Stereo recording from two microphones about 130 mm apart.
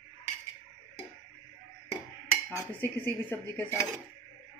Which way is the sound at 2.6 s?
15° left (ahead or behind).